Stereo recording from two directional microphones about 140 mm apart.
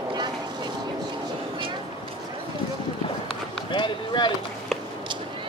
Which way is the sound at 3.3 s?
35° left (ahead or behind).